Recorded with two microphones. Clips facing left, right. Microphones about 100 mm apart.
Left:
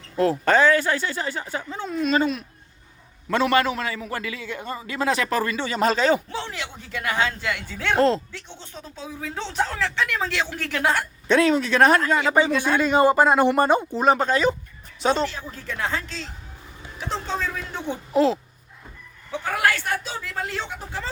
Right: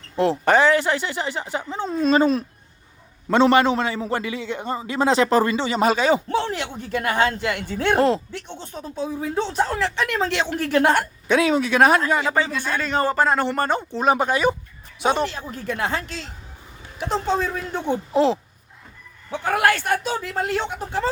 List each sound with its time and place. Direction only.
0.2 s a man's voice: 20° right (ahead or behind)
6.2 s a man's voice: 50° right (ahead or behind)
7.9 s speech: 15° right (ahead or behind)
8.3 s a man's voice: 55° right (ahead or behind)
9.0 s a man's voice: 20° right (ahead or behind)
9.4 s speech: 40° right (ahead or behind)
9.7 s a man's voice: 20° right (ahead or behind)
10.7 s a man's voice: 50° right (ahead or behind)
11.3 s speech: 10° right (ahead or behind)
12.3 s speech: 15° left (ahead or behind)
14.2 s speech: 15° right (ahead or behind)
17.1 s a man's voice: 20° right (ahead or behind)
19.3 s a man's voice: 55° right (ahead or behind)